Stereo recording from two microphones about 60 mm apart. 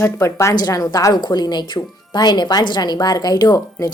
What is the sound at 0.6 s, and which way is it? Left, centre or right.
Speech, left.